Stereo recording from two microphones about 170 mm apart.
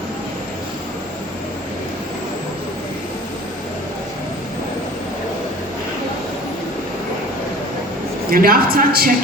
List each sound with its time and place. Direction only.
8.3 s a man's voice: 60° right (ahead or behind)